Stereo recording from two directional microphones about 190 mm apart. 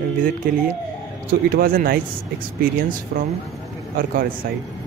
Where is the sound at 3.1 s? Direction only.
55° right (ahead or behind).